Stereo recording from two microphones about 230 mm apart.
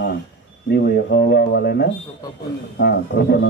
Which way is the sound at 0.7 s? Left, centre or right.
Left.